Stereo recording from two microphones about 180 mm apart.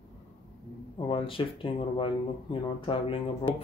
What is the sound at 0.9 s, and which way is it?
Speech, 30° left (ahead or behind).